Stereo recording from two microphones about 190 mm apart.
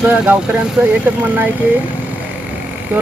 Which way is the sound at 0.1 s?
5° right (ahead or behind).